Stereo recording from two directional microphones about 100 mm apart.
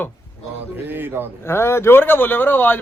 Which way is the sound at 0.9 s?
20° right (ahead or behind).